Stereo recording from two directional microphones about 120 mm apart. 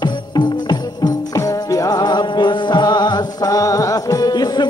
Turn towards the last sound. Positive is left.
turn(degrees=35)  # may be behind; listen again after turning